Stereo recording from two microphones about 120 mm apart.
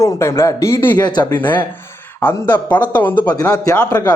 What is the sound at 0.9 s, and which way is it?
Speech, 35° left (ahead or behind).